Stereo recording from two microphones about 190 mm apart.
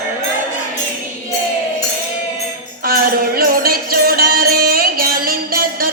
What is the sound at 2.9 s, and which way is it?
Music, 50° right (ahead or behind).